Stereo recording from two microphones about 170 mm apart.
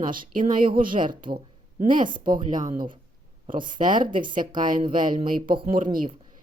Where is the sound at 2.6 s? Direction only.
55° right (ahead or behind).